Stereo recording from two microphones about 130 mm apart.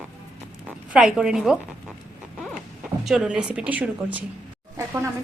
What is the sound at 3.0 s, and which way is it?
Speech, 5° right (ahead or behind).